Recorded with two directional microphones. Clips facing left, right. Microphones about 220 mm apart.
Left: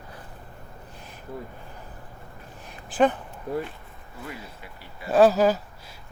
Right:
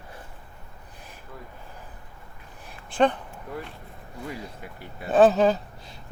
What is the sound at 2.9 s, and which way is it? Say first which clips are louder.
Speech: left 1 dB; 5° left (ahead or behind).